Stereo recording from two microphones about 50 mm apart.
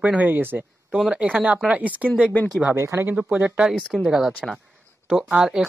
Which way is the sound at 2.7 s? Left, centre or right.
Right.